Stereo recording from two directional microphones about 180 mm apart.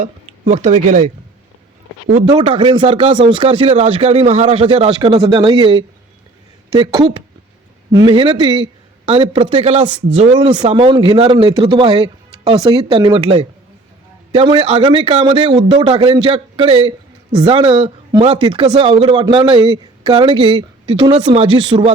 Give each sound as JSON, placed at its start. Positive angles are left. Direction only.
{"t": 0.0, "sound": "speech", "side_deg": -40}
{"t": 2.3, "sound": "speech", "side_deg": -30}